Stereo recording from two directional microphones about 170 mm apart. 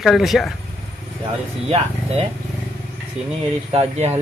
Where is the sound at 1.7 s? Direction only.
35° right (ahead or behind).